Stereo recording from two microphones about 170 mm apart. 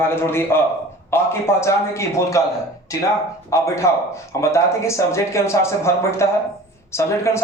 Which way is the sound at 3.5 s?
15° left (ahead or behind).